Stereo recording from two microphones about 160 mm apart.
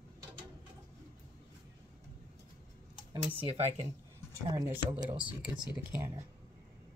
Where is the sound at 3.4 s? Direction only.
40° right (ahead or behind).